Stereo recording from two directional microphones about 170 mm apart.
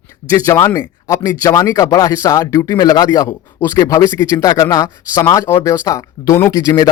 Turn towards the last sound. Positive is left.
turn(degrees=20)  # may be behind; listen again after turning